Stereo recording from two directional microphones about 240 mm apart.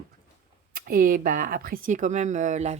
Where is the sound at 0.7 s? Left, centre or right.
Right.